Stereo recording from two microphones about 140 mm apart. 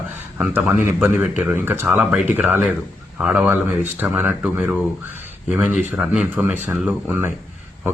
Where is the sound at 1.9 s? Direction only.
5° right (ahead or behind).